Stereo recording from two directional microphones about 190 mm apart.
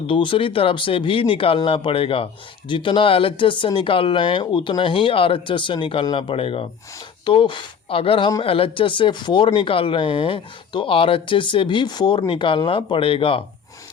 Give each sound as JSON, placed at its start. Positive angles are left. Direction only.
{"t": 0.1, "sound": "speech", "side_deg": 25}